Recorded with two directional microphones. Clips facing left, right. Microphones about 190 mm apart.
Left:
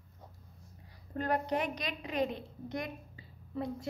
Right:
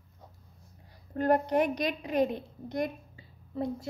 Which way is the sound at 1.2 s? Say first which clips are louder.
Right 7 dB; 50° right (ahead or behind).